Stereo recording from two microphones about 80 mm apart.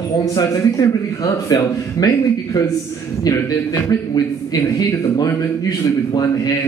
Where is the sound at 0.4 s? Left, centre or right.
Left.